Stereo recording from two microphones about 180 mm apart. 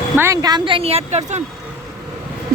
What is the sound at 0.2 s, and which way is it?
Speech, 20° right (ahead or behind).